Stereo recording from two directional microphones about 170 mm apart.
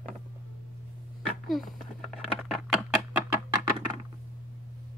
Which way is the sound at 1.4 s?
Centre (ahead or behind).